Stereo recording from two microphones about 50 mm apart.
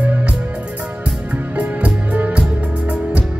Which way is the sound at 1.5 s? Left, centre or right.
Right.